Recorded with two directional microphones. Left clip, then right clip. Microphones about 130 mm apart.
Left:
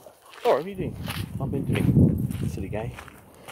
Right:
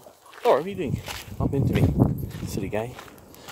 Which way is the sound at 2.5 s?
55° right (ahead or behind).